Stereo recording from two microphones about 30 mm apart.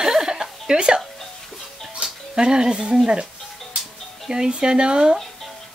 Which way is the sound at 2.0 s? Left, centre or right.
Right.